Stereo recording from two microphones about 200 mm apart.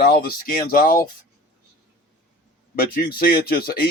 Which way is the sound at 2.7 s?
45° left (ahead or behind).